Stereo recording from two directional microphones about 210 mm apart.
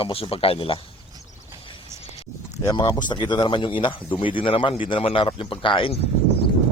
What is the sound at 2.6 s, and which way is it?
A man's voice, 15° left (ahead or behind).